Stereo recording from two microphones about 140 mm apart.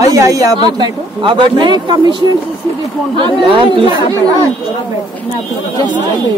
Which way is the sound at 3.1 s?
40° right (ahead or behind).